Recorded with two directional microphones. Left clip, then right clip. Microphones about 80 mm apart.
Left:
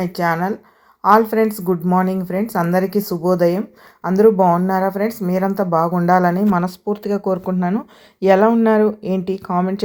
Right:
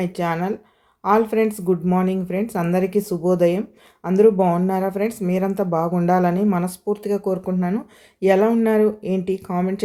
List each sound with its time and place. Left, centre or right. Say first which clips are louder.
0.2 s speech: left 6 dB; left
4.7 s speech: left 4 dB; left